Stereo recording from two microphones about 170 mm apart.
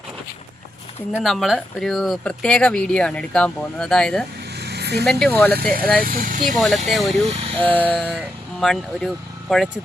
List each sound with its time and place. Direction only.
1.2 s speech: centre (ahead or behind)
4.5 s a sound: 75° right (ahead or behind)
5.0 s speech: 5° left (ahead or behind)
5.5 s speech: 65° right (ahead or behind)
6.5 s speech: centre (ahead or behind)
7.3 s speech: 35° right (ahead or behind)
7.7 s speech: 10° left (ahead or behind)